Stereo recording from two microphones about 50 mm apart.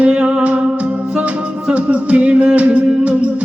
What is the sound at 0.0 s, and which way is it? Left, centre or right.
Music, right.